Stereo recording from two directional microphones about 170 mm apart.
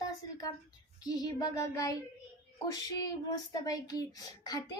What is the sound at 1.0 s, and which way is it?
Speech, 25° left (ahead or behind).